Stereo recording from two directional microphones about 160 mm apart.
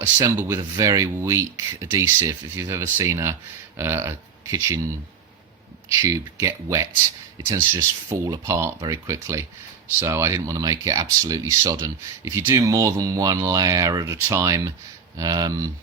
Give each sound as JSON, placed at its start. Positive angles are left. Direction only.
{"t": 0.0, "sound": "speech", "side_deg": -15}
{"t": 5.9, "sound": "speech", "side_deg": -20}